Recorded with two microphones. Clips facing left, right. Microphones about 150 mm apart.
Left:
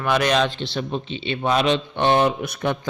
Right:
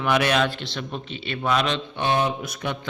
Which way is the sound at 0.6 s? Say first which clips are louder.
Left 6 dB; 30° left (ahead or behind).